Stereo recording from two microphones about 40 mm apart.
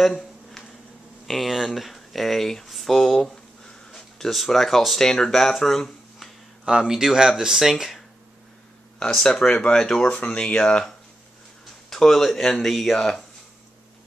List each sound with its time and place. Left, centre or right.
0.0 s a sound: centre
1.2 s speech: centre
3.0 s a sound: centre
4.3 s speech: centre
6.6 s speech: centre
9.0 s speech: centre
10.0 s speech: left
11.9 s speech: centre